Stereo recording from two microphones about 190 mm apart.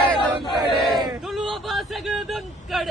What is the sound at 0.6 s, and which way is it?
Battle cry, centre (ahead or behind).